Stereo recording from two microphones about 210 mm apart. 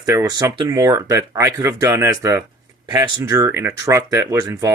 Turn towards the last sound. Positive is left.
turn(degrees=-15)  # may be behind; listen again after turning